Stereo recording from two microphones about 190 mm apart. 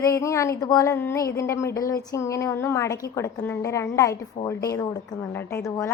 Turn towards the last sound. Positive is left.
turn(degrees=15)  # may be behind; listen again after turning